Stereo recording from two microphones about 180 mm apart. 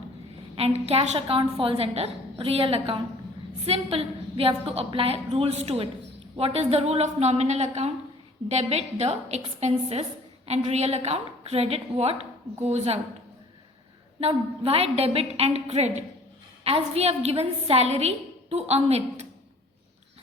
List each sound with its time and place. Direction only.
0.5 s a woman's voice: 35° right (ahead or behind)
14.2 s a woman's voice: 35° right (ahead or behind)